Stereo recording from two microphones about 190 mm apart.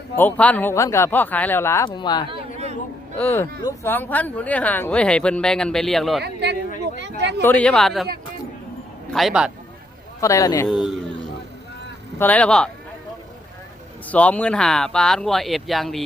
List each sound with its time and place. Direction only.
0.2 s speech: 10° left (ahead or behind)
2.3 s a sound: 35° right (ahead or behind)
3.2 s speech: 10° left (ahead or behind)
6.2 s a man's voice: 60° right (ahead or behind)
7.4 s speech: 5° left (ahead or behind)
9.0 s a man's voice: centre (ahead or behind)
10.2 s speech: 15° left (ahead or behind)
10.7 s a sound: centre (ahead or behind)
12.2 s speech: 5° left (ahead or behind)
14.1 s speech: 5° left (ahead or behind)